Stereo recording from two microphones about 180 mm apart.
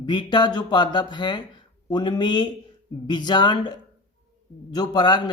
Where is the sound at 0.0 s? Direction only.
25° left (ahead or behind).